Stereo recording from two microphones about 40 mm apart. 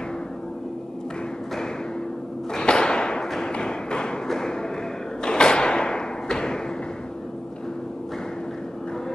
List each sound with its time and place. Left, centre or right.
2.5 s whip: left
3.3 s music: centre
4.3 s a sound: centre
5.2 s thump: left